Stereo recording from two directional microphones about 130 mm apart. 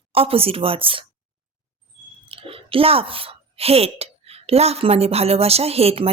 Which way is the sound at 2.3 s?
45° right (ahead or behind).